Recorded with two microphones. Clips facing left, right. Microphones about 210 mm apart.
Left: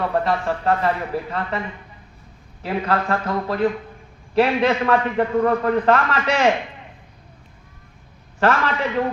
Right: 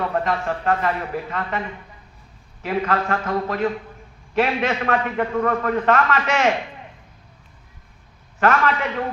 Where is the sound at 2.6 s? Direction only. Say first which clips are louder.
Even; 35° left (ahead or behind).